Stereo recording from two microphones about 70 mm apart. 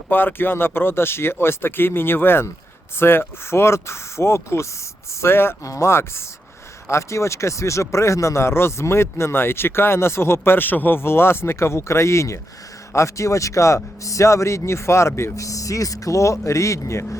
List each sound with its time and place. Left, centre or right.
0.1 s speech: left
5.6 s speech: left